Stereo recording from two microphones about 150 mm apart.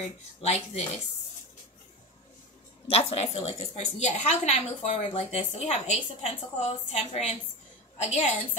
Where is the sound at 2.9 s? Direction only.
45° left (ahead or behind).